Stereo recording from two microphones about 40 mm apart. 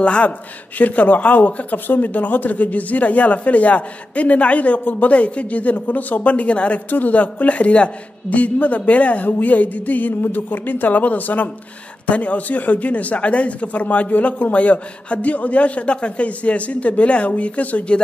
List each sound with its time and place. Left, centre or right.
0.0 s speech: left
0.7 s a man's voice: left
6.9 s a man's voice: left